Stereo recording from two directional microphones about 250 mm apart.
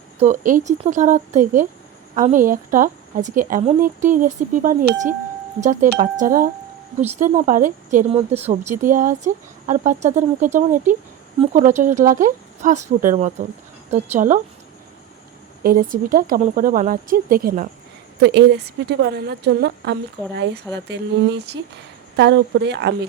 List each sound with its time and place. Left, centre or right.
0.2 s a woman's voice: right
15.6 s a woman's voice: right